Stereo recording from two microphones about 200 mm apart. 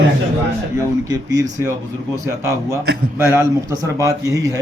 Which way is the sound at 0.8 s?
15° right (ahead or behind).